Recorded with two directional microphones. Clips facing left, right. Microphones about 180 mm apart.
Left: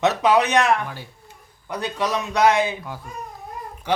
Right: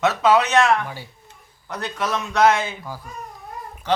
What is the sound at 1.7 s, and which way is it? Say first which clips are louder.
Speech: left 1 dB; 15° left (ahead or behind).